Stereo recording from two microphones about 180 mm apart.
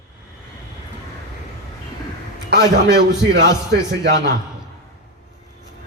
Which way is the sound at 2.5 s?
70° right (ahead or behind).